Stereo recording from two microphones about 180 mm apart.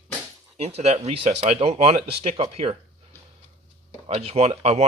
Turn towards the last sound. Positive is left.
turn(degrees=-35)  # may be behind; listen again after turning